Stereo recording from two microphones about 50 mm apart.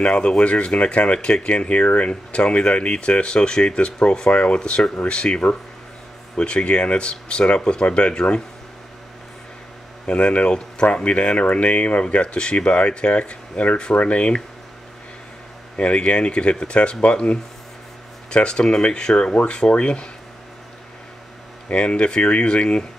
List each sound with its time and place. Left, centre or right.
0.0 s speech: left
10.0 s speech: left
15.8 s speech: left
21.6 s speech: left